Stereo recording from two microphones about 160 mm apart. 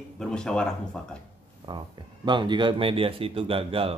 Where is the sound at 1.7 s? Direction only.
30° right (ahead or behind).